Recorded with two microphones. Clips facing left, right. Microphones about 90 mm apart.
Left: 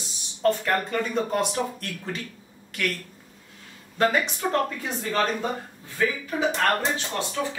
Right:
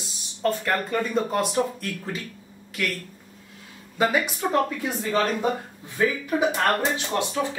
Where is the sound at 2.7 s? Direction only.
Centre (ahead or behind).